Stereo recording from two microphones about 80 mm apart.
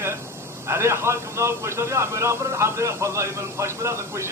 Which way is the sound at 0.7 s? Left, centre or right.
Right.